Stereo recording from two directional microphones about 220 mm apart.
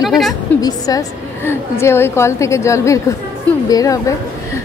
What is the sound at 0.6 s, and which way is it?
A woman's voice, 15° left (ahead or behind).